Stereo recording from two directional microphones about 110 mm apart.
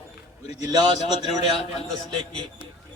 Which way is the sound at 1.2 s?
70° left (ahead or behind).